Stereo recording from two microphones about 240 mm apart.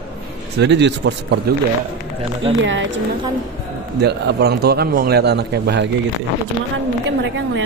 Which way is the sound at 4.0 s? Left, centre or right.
Right.